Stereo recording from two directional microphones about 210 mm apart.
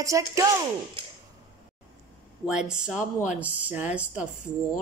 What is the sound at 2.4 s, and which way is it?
A woman's voice, 5° right (ahead or behind).